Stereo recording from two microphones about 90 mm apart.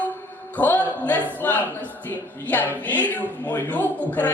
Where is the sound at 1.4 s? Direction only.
20° left (ahead or behind).